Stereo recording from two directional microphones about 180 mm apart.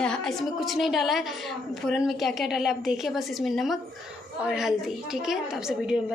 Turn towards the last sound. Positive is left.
turn(degrees=-5)  # may be behind; listen again after turning